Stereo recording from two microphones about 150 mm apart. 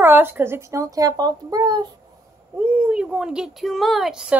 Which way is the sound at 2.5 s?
10° right (ahead or behind).